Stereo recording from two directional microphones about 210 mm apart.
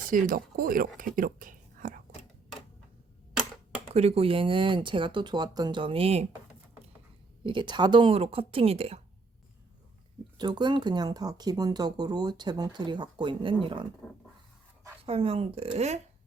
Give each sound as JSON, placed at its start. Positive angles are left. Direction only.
{"t": 0.1, "sound": "speech", "side_deg": -40}
{"t": 3.9, "sound": "speech", "side_deg": -30}
{"t": 7.4, "sound": "speech", "side_deg": -20}
{"t": 10.3, "sound": "speech", "side_deg": -20}
{"t": 14.0, "sound": "speech", "side_deg": 0}
{"t": 15.0, "sound": "speech", "side_deg": -25}